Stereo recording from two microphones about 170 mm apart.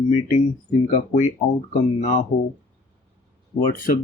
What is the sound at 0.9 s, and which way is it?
Speech, 50° left (ahead or behind).